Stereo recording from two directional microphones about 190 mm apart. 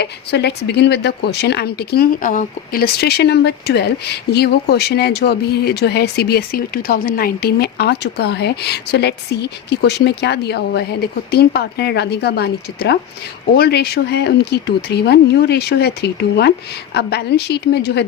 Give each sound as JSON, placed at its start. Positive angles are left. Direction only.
{"t": 0.0, "sound": "a woman's voice", "side_deg": 60}